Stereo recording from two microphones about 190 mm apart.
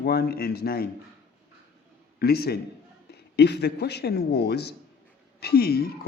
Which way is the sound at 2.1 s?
55° left (ahead or behind).